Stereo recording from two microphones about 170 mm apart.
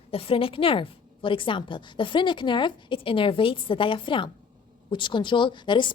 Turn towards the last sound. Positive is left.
turn(degrees=25)  # may be behind; listen again after turning